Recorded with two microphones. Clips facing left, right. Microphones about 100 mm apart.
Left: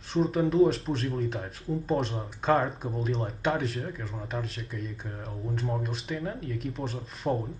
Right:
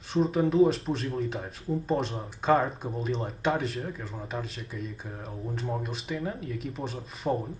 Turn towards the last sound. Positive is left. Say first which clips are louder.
# even
turn(degrees=0)  # may be behind; listen again after turning